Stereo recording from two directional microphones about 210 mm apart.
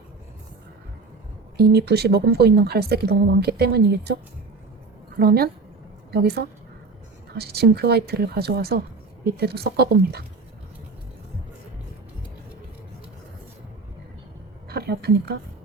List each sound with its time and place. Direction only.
1.5 s a woman's voice: 50° right (ahead or behind)
14.7 s a woman's voice: 50° right (ahead or behind)